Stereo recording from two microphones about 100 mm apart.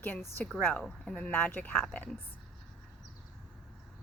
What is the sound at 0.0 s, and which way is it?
Speech, 20° left (ahead or behind).